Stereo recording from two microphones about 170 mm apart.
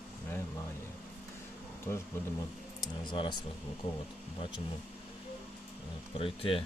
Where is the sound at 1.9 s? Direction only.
15° left (ahead or behind).